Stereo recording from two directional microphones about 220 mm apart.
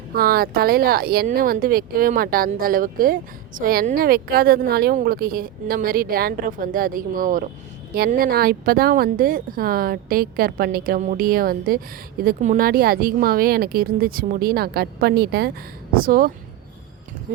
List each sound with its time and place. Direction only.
0.1 s a woman's voice: 45° right (ahead or behind)